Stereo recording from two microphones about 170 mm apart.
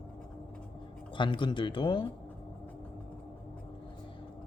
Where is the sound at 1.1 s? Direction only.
30° left (ahead or behind).